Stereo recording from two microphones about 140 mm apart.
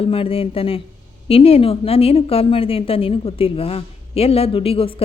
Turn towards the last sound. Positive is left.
turn(degrees=45)  # may be behind; listen again after turning